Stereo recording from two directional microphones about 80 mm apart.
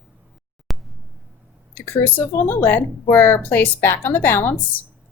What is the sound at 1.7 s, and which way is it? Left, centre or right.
Speech, left.